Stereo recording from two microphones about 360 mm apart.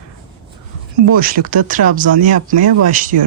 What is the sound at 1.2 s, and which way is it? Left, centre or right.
Speech, right.